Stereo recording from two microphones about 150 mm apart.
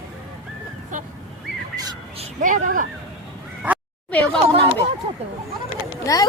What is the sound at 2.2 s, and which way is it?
Speech, 55° right (ahead or behind).